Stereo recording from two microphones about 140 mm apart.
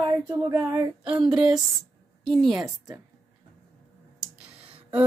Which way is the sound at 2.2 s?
5° left (ahead or behind).